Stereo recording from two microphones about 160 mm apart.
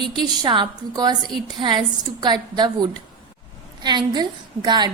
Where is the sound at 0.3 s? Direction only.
30° right (ahead or behind).